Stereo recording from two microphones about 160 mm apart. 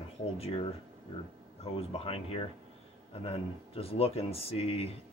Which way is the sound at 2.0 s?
35° left (ahead or behind).